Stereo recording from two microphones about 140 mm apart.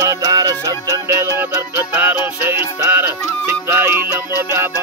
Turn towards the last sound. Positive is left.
turn(degrees=-15)  # may be behind; listen again after turning